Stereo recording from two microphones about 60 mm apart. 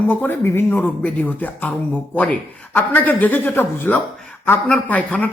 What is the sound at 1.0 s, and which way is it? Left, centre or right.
Speech, left.